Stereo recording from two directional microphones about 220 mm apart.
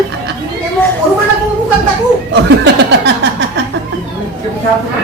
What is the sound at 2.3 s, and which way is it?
Chuckle, 50° right (ahead or behind).